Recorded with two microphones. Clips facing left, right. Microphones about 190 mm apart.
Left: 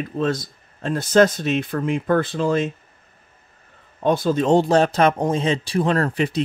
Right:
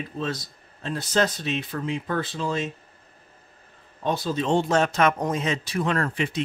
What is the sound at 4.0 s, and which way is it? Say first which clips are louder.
Speech: left 7 dB; 50° left (ahead or behind).